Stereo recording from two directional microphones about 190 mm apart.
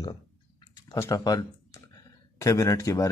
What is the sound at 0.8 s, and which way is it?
Speech, 15° left (ahead or behind).